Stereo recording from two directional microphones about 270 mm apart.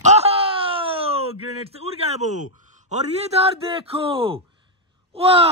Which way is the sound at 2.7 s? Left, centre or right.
Right.